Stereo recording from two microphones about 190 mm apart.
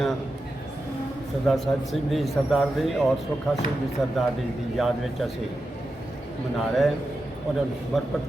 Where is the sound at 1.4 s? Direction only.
Centre (ahead or behind).